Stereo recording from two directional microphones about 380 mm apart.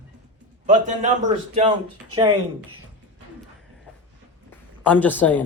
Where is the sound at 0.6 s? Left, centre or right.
Centre.